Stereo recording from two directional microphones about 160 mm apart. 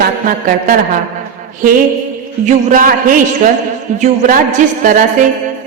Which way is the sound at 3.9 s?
50° right (ahead or behind).